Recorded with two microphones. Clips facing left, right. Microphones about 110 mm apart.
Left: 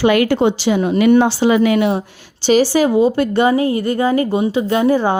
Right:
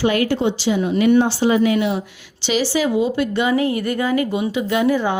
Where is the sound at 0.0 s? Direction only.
70° left (ahead or behind).